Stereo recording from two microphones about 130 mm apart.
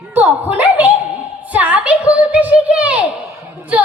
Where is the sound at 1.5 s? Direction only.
10° right (ahead or behind).